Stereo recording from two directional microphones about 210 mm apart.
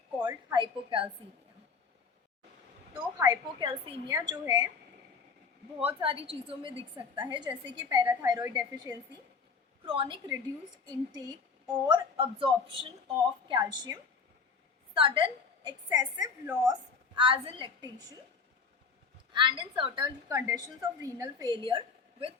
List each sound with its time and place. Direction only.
0.2 s a woman's voice: 20° right (ahead or behind)
2.9 s a woman's voice: 15° right (ahead or behind)
5.8 s a woman's voice: 25° right (ahead or behind)
19.3 s a woman's voice: 25° right (ahead or behind)